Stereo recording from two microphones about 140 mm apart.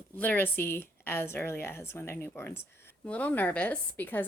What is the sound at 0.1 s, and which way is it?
Speech, 15° left (ahead or behind).